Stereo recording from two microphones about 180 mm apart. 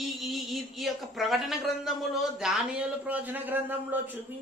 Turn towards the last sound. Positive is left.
turn(degrees=-10)  # may be behind; listen again after turning